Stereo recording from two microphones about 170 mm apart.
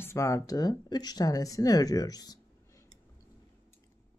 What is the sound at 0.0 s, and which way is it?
Speech, 15° left (ahead or behind).